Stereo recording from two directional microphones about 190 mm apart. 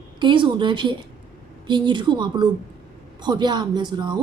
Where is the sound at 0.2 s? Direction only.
25° right (ahead or behind).